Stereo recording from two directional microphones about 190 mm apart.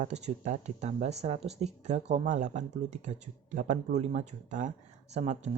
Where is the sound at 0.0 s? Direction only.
35° right (ahead or behind).